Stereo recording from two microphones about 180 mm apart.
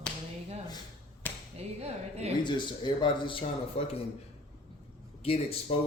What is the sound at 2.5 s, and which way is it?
Speech, 25° left (ahead or behind).